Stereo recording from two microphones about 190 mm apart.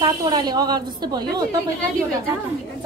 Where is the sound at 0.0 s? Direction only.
20° right (ahead or behind).